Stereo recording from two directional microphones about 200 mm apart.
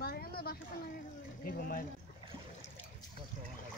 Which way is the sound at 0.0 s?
50° left (ahead or behind).